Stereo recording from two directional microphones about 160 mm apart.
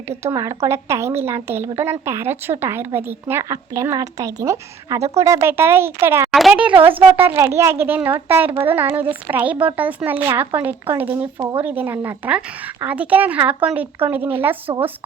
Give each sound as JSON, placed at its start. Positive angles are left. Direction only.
{"t": 0.1, "sound": "a woman's voice", "side_deg": -15}
{"t": 6.3, "sound": "a woman's voice", "side_deg": -5}
{"t": 14.7, "sound": "speech", "side_deg": -25}